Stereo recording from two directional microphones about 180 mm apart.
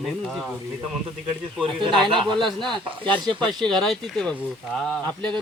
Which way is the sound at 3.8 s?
5° left (ahead or behind).